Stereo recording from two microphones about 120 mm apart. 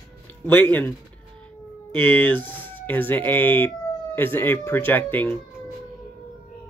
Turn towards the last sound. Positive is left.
turn(degrees=15)  # may be behind; listen again after turning